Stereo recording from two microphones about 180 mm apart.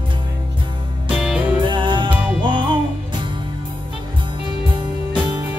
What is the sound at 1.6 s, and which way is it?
Music, 25° right (ahead or behind).